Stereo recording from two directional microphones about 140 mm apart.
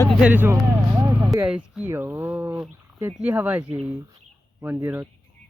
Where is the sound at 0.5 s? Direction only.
20° right (ahead or behind).